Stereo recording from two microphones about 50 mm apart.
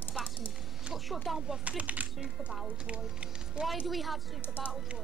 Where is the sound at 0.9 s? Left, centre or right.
Centre.